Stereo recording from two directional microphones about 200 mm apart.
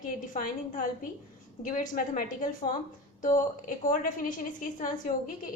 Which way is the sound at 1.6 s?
40° left (ahead or behind).